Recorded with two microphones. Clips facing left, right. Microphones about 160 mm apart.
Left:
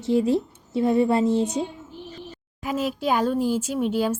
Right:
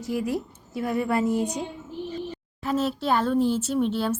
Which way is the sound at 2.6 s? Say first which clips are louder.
Even; 10° left (ahead or behind).